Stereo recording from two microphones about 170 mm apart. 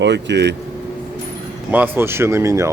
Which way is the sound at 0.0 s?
90° right.